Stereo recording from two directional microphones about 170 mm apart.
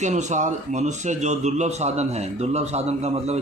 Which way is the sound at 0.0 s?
45° right (ahead or behind).